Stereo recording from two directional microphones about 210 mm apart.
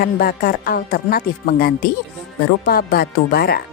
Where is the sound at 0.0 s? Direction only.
45° left (ahead or behind).